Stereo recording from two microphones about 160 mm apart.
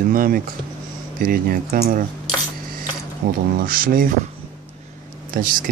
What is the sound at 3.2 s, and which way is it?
Speech, 60° right (ahead or behind).